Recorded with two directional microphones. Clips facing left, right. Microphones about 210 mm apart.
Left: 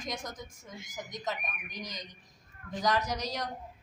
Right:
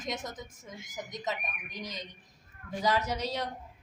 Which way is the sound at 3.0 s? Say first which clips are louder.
Right 2 dB; 25° right (ahead or behind).